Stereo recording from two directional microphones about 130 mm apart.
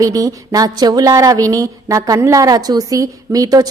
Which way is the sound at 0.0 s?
25° right (ahead or behind).